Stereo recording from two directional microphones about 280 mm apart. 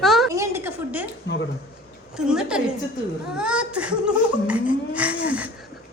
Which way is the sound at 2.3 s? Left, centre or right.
Centre.